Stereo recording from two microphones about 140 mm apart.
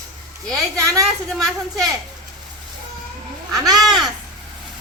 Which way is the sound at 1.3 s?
Centre (ahead or behind).